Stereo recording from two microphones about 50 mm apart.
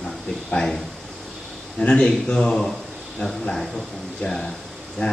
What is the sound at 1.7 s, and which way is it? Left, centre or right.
A man's voice, centre.